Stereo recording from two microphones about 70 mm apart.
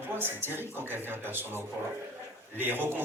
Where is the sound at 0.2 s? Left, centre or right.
Right.